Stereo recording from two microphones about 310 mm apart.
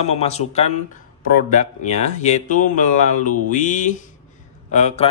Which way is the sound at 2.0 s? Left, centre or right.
Left.